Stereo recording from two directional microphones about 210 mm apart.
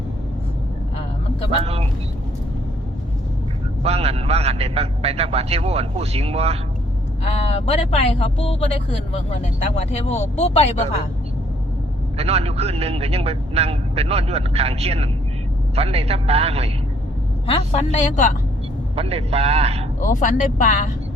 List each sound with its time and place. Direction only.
1.6 s speech: 30° right (ahead or behind)
3.8 s speech: 30° right (ahead or behind)
7.3 s speech: 30° left (ahead or behind)
12.1 s speech: 30° right (ahead or behind)
17.4 s a woman's voice: 25° left (ahead or behind)
18.9 s speech: 30° right (ahead or behind)
20.0 s speech: 35° left (ahead or behind)